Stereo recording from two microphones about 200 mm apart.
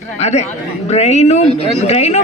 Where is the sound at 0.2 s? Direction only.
35° left (ahead or behind).